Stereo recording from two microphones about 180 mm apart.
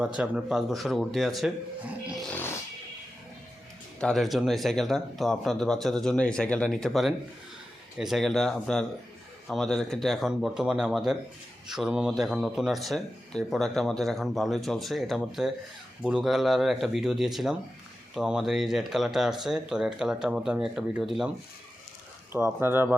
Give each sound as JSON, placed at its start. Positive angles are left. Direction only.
{"t": 0.2, "sound": "speech", "side_deg": -5}
{"t": 4.0, "sound": "speech", "side_deg": 0}
{"t": 22.3, "sound": "speech", "side_deg": -10}